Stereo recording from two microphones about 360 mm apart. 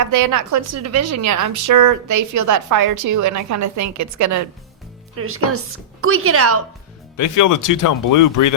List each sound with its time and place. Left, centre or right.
0.0 s a woman's voice: right
5.1 s speech: right
7.2 s speech: left